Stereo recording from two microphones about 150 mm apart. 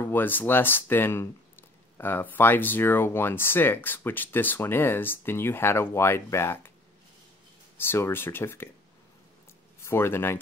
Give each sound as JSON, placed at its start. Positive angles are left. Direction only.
{"t": 0.0, "sound": "speech", "side_deg": 15}
{"t": 7.8, "sound": "speech", "side_deg": 15}
{"t": 9.8, "sound": "speech", "side_deg": 15}